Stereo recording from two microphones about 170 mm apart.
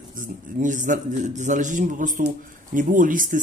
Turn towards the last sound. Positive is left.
turn(degrees=-50)  # may be behind; listen again after turning